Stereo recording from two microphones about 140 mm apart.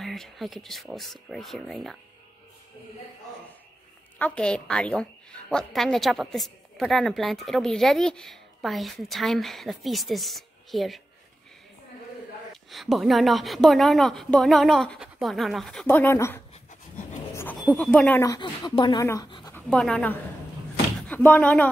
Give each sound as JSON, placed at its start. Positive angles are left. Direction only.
{"t": 0.0, "sound": "a woman's voice", "side_deg": 0}
{"t": 4.2, "sound": "a woman's voice", "side_deg": 5}
{"t": 12.7, "sound": "a woman's voice", "side_deg": 0}
{"t": 17.6, "sound": "speech", "side_deg": 10}
{"t": 18.2, "sound": "speech", "side_deg": 25}
{"t": 19.5, "sound": "speech", "side_deg": 10}